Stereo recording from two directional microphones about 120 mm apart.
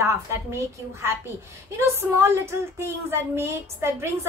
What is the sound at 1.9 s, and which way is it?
A woman's voice, 20° right (ahead or behind).